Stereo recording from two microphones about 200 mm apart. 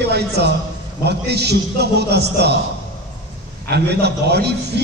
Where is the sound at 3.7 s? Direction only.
55° right (ahead or behind).